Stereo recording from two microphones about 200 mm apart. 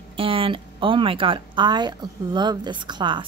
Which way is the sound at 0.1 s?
25° right (ahead or behind).